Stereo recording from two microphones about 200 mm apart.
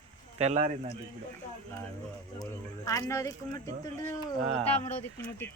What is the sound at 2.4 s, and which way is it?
Speech, 15° left (ahead or behind).